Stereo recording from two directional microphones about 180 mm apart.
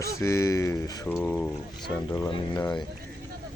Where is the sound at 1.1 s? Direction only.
5° left (ahead or behind).